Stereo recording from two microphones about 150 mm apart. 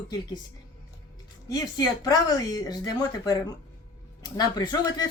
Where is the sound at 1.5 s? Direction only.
25° left (ahead or behind).